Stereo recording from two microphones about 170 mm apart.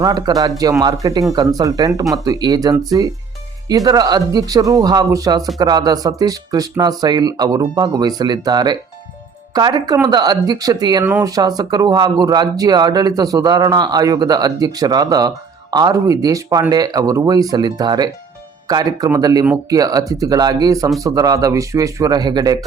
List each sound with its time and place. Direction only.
0.0 s speech: 25° right (ahead or behind)